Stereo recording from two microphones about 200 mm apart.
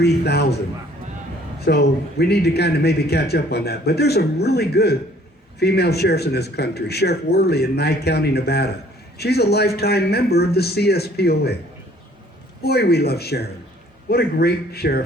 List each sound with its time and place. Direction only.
0.0 s speech: 55° left (ahead or behind)
1.6 s a man's voice: 55° left (ahead or behind)
12.6 s a man's voice: 55° left (ahead or behind)